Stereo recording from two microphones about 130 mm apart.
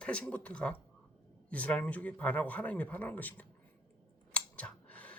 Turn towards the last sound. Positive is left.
turn(degrees=10)  # may be behind; listen again after turning